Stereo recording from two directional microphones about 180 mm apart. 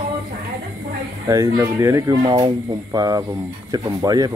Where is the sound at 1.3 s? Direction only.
15° right (ahead or behind).